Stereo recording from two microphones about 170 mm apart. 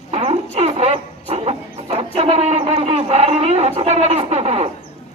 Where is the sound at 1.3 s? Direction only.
35° right (ahead or behind).